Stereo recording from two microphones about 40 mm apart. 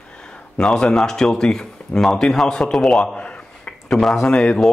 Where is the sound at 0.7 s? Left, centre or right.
Centre.